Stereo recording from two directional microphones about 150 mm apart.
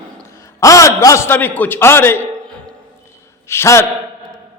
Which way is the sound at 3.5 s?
15° left (ahead or behind).